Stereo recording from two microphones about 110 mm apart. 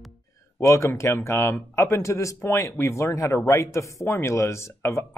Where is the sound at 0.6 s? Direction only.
25° left (ahead or behind).